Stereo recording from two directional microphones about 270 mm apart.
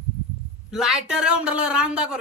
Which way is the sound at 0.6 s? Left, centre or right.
Centre.